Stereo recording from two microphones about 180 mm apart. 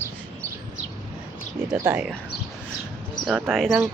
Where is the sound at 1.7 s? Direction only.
15° right (ahead or behind).